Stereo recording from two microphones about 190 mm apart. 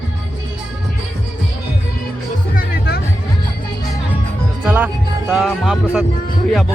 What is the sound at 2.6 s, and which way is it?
Music, 55° left (ahead or behind).